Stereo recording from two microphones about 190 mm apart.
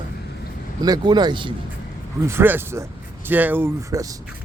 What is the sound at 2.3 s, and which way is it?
A man's voice, 10° right (ahead or behind).